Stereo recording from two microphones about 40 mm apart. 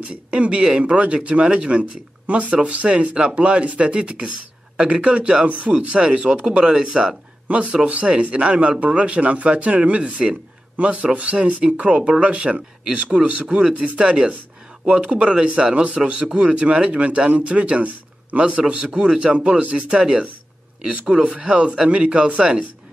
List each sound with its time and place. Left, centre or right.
0.1 s a man's voice: right
18.7 s speech: right
21.3 s speech: right